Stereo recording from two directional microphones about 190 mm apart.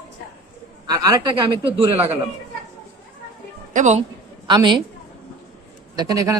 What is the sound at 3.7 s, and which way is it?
Speech, 40° right (ahead or behind).